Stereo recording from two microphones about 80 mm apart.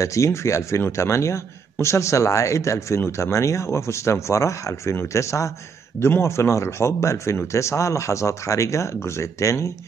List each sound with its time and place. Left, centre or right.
0.0 s a man's voice: left